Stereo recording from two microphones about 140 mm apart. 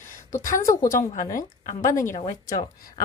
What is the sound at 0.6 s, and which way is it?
Speech, 25° left (ahead or behind).